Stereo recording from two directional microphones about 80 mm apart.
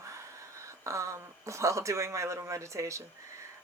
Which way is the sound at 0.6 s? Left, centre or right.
Right.